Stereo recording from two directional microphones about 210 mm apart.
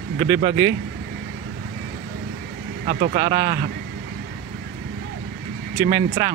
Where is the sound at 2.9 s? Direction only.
45° right (ahead or behind).